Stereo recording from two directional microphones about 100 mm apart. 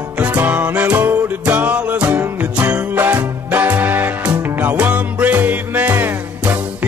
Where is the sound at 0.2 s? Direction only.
15° right (ahead or behind).